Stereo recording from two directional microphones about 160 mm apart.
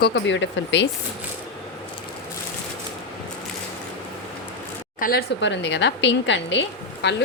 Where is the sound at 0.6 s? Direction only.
90° left.